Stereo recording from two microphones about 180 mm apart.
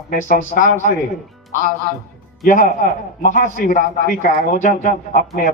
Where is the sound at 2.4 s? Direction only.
50° left (ahead or behind).